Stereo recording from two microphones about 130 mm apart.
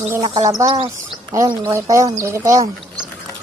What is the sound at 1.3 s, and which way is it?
Speech, 25° right (ahead or behind).